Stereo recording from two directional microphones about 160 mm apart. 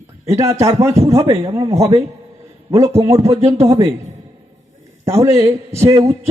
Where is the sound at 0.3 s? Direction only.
20° right (ahead or behind).